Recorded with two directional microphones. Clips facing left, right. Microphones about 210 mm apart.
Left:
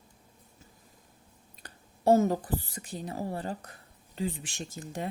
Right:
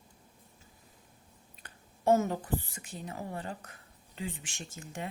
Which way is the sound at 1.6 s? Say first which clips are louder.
Left 3 dB; 35° left (ahead or behind).